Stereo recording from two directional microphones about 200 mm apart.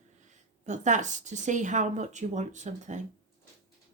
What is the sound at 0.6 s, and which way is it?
A woman's voice, 35° right (ahead or behind).